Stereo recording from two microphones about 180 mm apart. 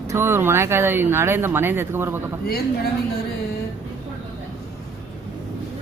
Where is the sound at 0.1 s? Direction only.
15° right (ahead or behind).